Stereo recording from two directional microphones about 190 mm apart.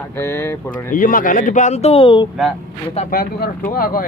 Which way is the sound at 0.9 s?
45° left (ahead or behind).